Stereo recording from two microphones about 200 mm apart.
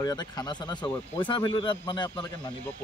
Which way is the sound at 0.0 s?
20° left (ahead or behind).